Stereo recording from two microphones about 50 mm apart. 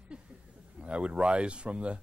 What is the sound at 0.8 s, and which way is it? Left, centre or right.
Speech, right.